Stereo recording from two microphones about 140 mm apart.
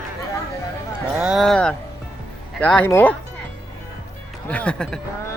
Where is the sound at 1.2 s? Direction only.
5° right (ahead or behind); by 3.2 s 15° left (ahead or behind).